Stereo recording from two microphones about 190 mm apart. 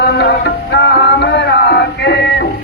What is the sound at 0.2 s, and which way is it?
Music, 60° left (ahead or behind).